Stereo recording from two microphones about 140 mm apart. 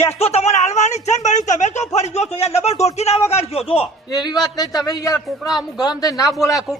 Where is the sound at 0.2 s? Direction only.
50° left (ahead or behind).